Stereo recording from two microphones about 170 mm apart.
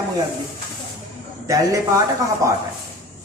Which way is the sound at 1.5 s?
20° right (ahead or behind).